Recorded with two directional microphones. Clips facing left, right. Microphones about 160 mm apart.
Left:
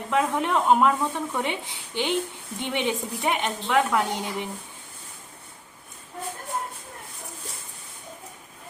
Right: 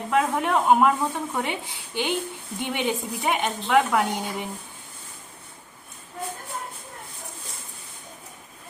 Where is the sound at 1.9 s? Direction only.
5° right (ahead or behind).